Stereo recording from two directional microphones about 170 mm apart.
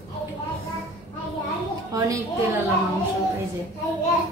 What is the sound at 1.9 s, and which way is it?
Speech, 20° right (ahead or behind).